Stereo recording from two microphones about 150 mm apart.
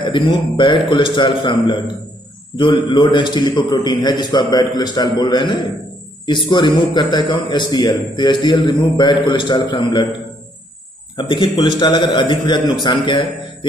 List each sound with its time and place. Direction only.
0.0 s a man's voice: 35° left (ahead or behind)
11.1 s a man's voice: 30° left (ahead or behind)